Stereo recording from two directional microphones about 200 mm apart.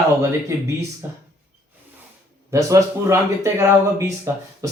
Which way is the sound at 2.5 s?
15° right (ahead or behind).